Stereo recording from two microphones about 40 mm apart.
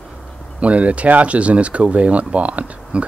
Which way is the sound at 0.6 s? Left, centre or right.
Right.